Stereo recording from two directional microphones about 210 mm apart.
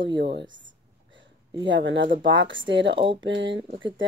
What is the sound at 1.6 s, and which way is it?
Speech, 65° right (ahead or behind).